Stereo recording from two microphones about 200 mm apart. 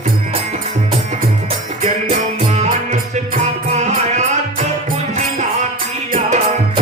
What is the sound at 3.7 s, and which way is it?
Music, 35° right (ahead or behind).